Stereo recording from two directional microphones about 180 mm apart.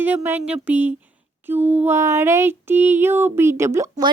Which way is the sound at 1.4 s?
10° right (ahead or behind).